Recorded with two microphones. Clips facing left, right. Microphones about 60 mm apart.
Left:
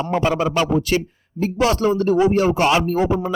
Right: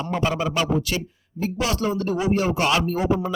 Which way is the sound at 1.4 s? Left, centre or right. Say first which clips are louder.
Left 6 dB; left.